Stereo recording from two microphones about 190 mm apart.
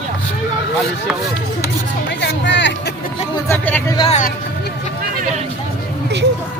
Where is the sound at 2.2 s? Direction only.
65° left (ahead or behind).